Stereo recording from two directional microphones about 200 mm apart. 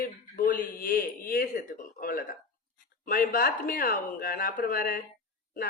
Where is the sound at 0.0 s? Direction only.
45° left (ahead or behind).